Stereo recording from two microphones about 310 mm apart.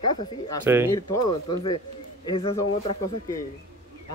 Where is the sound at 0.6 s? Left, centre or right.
Centre.